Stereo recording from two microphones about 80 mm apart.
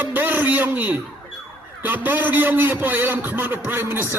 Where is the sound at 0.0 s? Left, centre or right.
Right.